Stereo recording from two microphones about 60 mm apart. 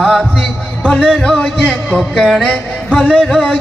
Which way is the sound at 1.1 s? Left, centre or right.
Centre.